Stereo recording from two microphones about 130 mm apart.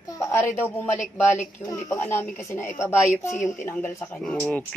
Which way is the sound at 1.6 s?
25° left (ahead or behind).